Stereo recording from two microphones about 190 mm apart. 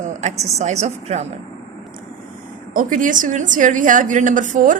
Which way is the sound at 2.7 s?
45° right (ahead or behind).